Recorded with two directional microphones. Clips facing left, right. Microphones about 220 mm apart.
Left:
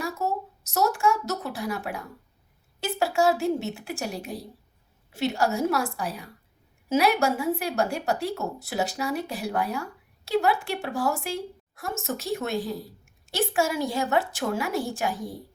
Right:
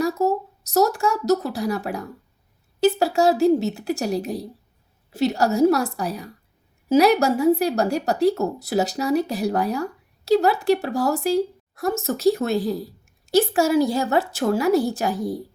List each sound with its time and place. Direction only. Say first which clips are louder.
0.0 s speech: right 8 dB; 35° right (ahead or behind)